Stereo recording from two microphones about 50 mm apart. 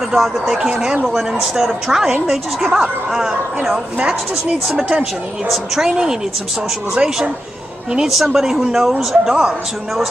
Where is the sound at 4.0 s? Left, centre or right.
Right.